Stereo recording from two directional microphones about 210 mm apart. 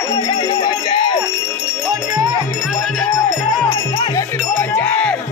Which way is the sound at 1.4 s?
15° left (ahead or behind).